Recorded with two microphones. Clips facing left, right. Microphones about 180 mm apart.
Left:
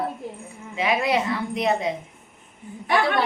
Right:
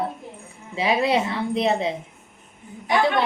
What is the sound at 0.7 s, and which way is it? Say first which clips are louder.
A woman's voice: right 2 dB; 30° right (ahead or behind).